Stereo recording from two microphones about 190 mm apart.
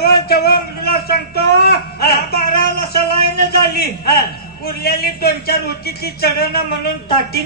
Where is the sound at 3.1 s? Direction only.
55° left (ahead or behind).